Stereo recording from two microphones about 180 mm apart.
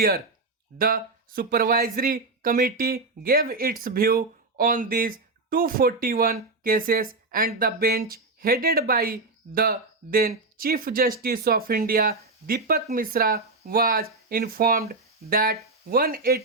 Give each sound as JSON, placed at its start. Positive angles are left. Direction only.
{"t": 0.8, "sound": "speech", "side_deg": -50}